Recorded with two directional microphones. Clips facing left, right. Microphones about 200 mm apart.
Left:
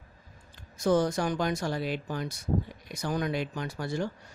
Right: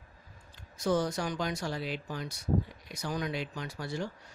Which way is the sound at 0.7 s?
50° left (ahead or behind).